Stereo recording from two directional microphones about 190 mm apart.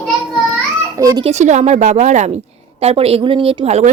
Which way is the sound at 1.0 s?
20° right (ahead or behind).